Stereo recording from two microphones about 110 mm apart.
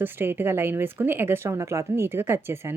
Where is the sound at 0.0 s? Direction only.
20° right (ahead or behind).